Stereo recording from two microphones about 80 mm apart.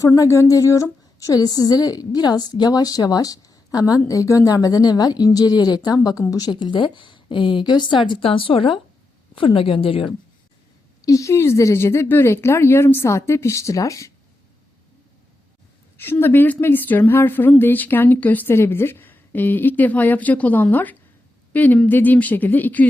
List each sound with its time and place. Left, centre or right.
0.0 s a woman's voice: left
11.0 s speech: left
16.0 s a woman's voice: left